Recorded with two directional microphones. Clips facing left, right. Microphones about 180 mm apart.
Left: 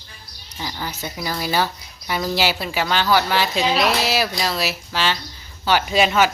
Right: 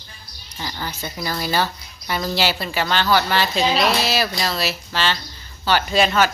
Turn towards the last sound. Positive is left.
turn(degrees=10)  # may be behind; listen again after turning